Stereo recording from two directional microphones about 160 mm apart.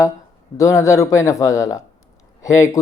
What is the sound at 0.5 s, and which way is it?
Speech, 20° left (ahead or behind).